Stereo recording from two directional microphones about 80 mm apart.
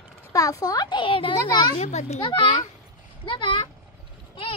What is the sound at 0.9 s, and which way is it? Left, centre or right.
A child's voice, left.